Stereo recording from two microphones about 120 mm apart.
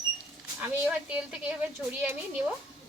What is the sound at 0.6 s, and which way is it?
Speech, 10° right (ahead or behind).